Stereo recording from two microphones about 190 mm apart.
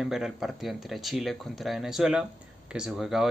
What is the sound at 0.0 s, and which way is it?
Speech, centre (ahead or behind).